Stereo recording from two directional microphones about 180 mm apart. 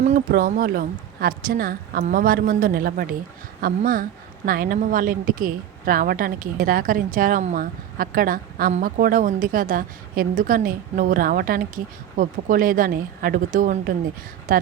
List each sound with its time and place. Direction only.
0.0 s a woman's voice: 50° right (ahead or behind)